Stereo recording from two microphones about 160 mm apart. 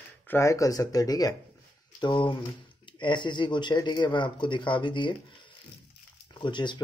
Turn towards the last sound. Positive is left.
turn(degrees=30)  # may be behind; listen again after turning